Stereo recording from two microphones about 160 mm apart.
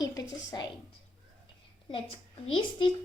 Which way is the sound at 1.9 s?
30° left (ahead or behind).